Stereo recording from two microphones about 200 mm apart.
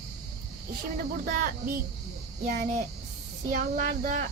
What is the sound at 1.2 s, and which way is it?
Speech, 45° right (ahead or behind).